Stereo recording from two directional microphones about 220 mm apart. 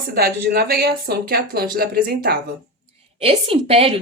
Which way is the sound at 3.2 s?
25° right (ahead or behind).